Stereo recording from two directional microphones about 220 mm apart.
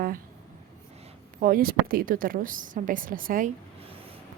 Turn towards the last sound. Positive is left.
turn(degrees=-40)  # may be behind; listen again after turning